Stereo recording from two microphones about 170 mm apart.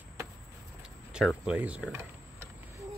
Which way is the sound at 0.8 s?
5° right (ahead or behind).